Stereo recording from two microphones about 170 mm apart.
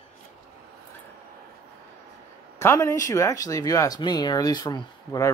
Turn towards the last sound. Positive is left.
turn(degrees=25)  # may be behind; listen again after turning